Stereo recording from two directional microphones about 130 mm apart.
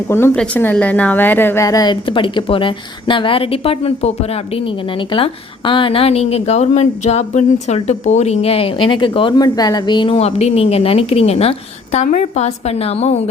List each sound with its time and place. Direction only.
0.3 s a woman's voice: 10° left (ahead or behind); by 10.2 s 35° left (ahead or behind)
10.2 s a woman's voice: 55° left (ahead or behind)